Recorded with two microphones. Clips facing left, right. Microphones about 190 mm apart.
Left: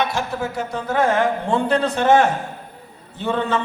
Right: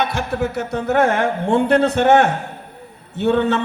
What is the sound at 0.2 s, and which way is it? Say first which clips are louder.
A man's voice: right 3 dB; 70° right (ahead or behind).